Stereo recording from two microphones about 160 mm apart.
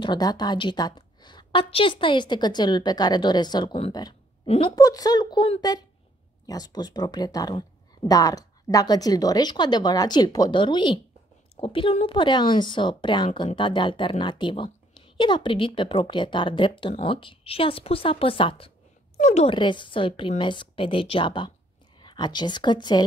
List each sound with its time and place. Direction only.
0.0 s speech: 25° left (ahead or behind)
4.5 s a woman's voice: 40° left (ahead or behind)
4.7 s a woman's voice: 25° left (ahead or behind)
19.1 s a woman's voice: 45° left (ahead or behind)
19.5 s a woman's voice: 30° left (ahead or behind)